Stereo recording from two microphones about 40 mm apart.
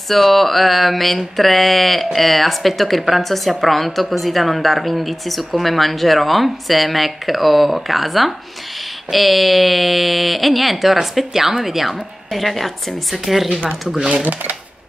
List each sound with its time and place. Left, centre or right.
0.1 s a woman's voice: centre
13.9 s speech: right
14.2 s speech: right